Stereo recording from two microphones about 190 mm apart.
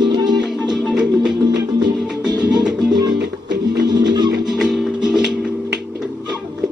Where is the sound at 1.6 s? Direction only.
20° right (ahead or behind).